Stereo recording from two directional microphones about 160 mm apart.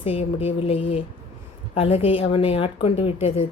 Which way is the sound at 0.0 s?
40° left (ahead or behind).